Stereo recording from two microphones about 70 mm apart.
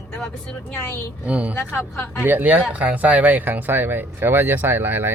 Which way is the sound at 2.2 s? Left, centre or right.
Right.